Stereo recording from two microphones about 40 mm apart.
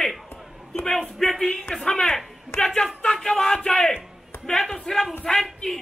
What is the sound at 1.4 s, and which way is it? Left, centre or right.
Speech, left.